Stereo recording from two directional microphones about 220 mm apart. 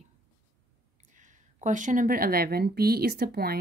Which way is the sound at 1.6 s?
35° right (ahead or behind).